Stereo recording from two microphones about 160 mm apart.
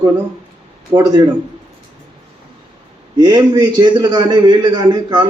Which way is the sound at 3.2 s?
25° right (ahead or behind).